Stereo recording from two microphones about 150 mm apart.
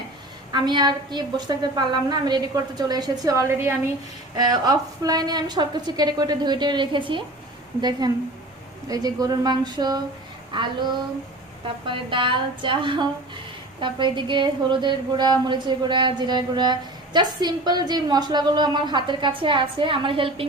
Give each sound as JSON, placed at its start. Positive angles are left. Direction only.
{"t": 0.5, "sound": "a woman's voice", "side_deg": -30}
{"t": 11.9, "sound": "a woman's voice", "side_deg": -35}